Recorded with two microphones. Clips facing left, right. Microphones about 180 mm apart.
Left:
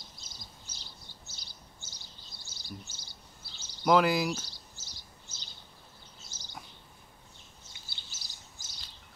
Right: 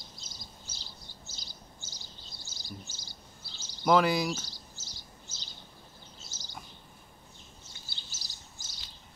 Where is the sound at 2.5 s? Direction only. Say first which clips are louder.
Even; 60° left (ahead or behind).